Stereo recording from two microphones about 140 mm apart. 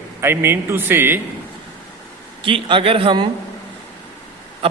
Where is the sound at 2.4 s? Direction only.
40° right (ahead or behind).